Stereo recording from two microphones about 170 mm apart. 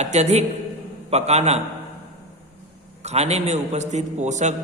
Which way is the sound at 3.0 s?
40° right (ahead or behind).